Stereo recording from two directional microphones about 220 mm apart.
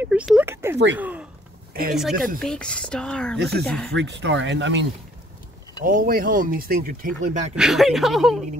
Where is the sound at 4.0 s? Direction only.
55° right (ahead or behind).